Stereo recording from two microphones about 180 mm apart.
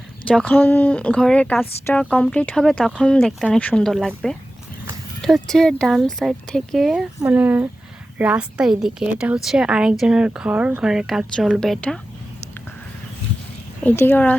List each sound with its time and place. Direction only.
0.3 s a woman's voice: 5° left (ahead or behind)
13.8 s speech: 10° left (ahead or behind)